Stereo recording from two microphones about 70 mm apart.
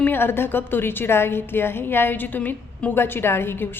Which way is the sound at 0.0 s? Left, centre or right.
Left.